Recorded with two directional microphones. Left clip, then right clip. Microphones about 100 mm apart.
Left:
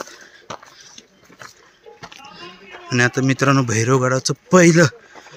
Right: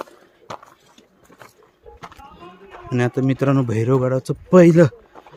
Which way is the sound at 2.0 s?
15° right (ahead or behind).